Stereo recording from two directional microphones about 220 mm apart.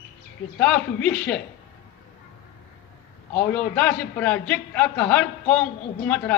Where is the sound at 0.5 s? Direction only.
5° left (ahead or behind).